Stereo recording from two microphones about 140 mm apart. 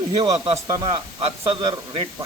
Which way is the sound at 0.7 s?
30° right (ahead or behind).